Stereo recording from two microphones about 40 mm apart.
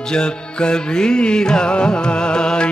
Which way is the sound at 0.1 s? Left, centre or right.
Left.